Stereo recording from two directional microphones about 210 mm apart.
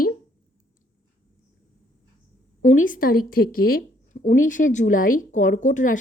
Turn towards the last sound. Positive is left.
turn(degrees=35)  # may be behind; listen again after turning